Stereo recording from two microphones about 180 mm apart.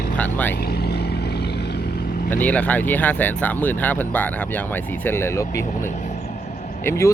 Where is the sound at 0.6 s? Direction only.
60° left (ahead or behind).